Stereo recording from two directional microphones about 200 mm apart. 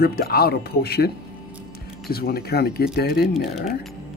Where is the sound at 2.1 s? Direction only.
50° left (ahead or behind).